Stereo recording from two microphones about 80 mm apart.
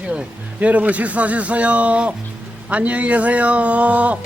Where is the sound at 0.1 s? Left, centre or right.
Centre.